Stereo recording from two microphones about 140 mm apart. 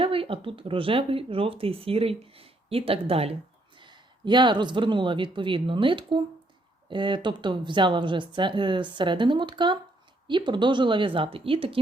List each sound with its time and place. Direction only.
0.0 s speech: 40° right (ahead or behind)
3.8 s speech: 35° right (ahead or behind)